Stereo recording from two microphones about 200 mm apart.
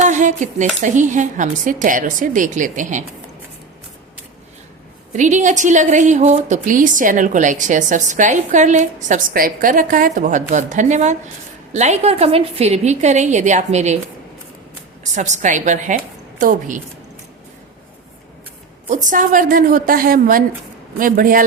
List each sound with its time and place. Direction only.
0.0 s a woman's voice: 35° right (ahead or behind)
5.1 s a woman's voice: 40° right (ahead or behind)
15.1 s a woman's voice: 35° right (ahead or behind)
18.9 s a woman's voice: 40° right (ahead or behind)